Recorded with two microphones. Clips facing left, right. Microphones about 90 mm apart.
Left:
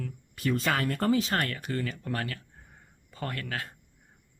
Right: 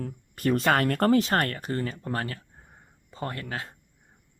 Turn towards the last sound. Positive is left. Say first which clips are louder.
# right 1 dB
turn(degrees=-25)  # may be behind; listen again after turning